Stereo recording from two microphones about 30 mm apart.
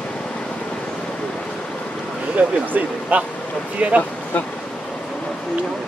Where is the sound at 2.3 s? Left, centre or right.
Right.